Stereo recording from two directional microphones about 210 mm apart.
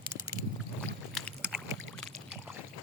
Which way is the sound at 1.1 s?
Centre (ahead or behind).